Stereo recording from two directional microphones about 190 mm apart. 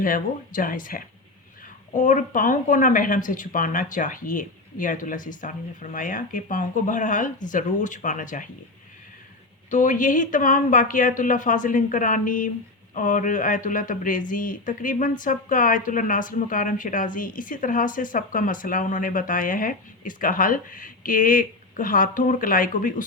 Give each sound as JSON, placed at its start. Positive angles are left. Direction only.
{"t": 0.0, "sound": "speech", "side_deg": 45}
{"t": 9.6, "sound": "speech", "side_deg": 40}